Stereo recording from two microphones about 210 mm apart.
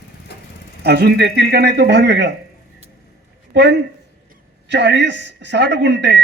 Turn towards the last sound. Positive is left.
turn(degrees=-55)  # may be behind; listen again after turning